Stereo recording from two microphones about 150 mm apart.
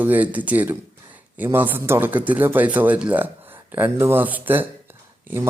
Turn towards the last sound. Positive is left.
turn(degrees=-15)  # may be behind; listen again after turning